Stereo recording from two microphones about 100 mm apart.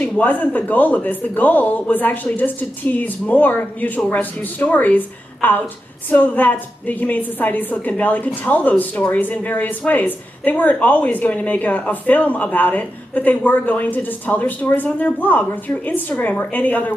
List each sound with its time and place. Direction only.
0.0 s speech: 15° left (ahead or behind)